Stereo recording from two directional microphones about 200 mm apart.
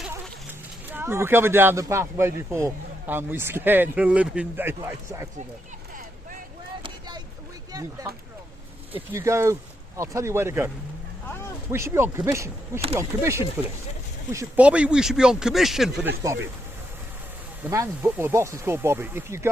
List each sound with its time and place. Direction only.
0.9 s speech: 10° right (ahead or behind)
7.7 s speech: 15° right (ahead or behind)
9.1 s speech: 15° right (ahead or behind)
11.7 s speech: 10° right (ahead or behind)
17.6 s speech: 15° right (ahead or behind)